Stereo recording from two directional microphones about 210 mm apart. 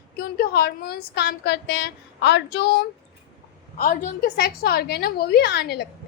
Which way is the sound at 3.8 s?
40° left (ahead or behind).